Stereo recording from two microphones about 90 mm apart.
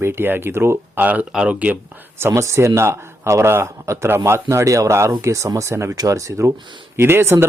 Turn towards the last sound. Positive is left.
turn(degrees=-30)  # may be behind; listen again after turning